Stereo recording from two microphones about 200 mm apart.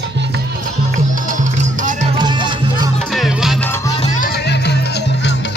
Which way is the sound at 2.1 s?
25° right (ahead or behind).